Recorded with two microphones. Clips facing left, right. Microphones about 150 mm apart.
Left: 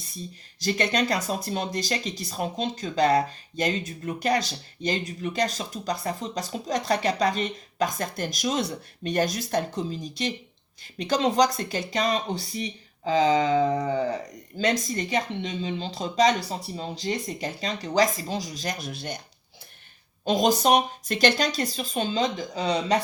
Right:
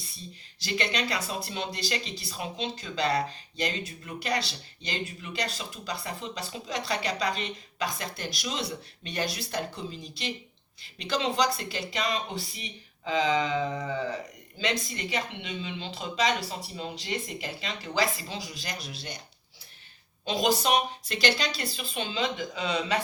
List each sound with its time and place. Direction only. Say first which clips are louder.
0.6 s speech: left 6 dB; 45° left (ahead or behind)
20.2 s speech: left 5 dB; 45° left (ahead or behind)